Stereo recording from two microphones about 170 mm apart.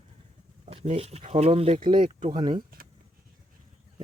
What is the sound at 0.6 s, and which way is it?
Speech, 35° right (ahead or behind).